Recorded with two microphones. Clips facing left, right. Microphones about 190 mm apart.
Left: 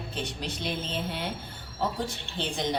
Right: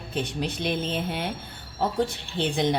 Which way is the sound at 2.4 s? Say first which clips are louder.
Right 6 dB; 60° right (ahead or behind).